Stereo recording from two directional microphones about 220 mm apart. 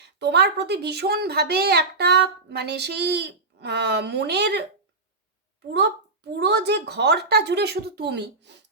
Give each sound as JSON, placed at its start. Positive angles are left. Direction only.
{"t": 0.0, "sound": "speech", "side_deg": -50}
{"t": 6.4, "sound": "speech", "side_deg": -50}